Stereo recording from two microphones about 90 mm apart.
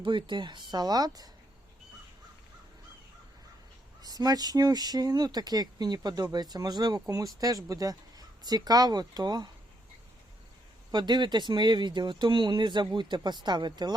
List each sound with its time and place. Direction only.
0.0 s speech: 65° right (ahead or behind); by 1.3 s 45° right (ahead or behind)
4.0 s speech: 45° right (ahead or behind)
10.9 s speech: 55° right (ahead or behind)